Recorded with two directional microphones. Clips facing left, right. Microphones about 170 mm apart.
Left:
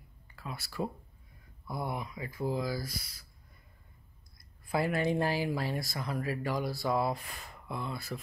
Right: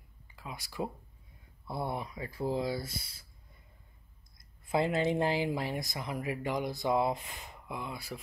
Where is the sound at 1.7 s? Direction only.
30° right (ahead or behind).